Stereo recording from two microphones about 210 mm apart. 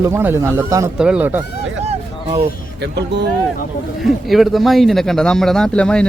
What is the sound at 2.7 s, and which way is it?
Speech, 55° right (ahead or behind).